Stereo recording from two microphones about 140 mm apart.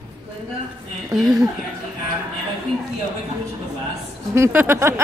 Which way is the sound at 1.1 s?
Centre (ahead or behind).